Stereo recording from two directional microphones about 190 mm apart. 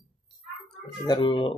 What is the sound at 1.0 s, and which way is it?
Speech, 25° left (ahead or behind).